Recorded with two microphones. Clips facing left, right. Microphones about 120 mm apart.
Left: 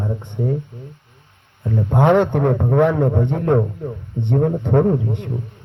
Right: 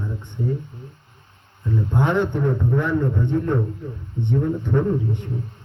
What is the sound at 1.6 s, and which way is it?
A man's voice, 55° left (ahead or behind).